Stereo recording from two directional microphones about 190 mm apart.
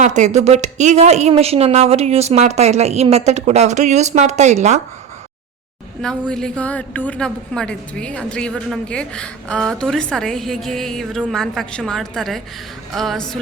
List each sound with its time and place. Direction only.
0.0 s a woman's voice: 40° right (ahead or behind)
6.0 s a woman's voice: 5° left (ahead or behind)